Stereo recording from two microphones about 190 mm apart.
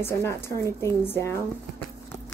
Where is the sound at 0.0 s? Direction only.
15° left (ahead or behind).